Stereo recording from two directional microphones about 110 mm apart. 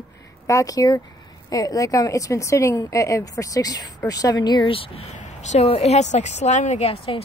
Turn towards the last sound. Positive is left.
turn(degrees=85)